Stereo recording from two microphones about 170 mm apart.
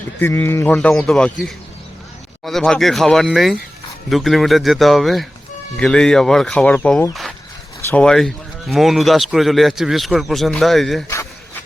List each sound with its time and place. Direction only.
0.2 s speech: 15° left (ahead or behind)
0.7 s speech: 5° left (ahead or behind)